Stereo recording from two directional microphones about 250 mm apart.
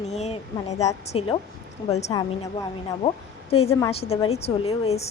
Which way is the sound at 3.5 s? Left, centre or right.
Left.